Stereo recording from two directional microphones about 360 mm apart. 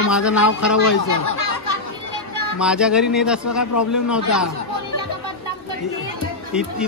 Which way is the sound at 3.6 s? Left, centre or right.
Left.